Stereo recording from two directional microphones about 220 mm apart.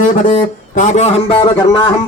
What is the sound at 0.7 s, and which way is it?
A man's voice, 30° left (ahead or behind).